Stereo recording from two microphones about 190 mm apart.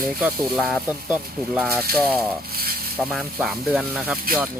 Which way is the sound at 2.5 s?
55° right (ahead or behind).